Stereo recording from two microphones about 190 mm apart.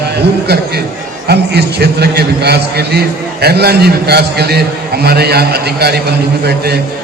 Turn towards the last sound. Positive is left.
turn(degrees=-60)  # may be behind; listen again after turning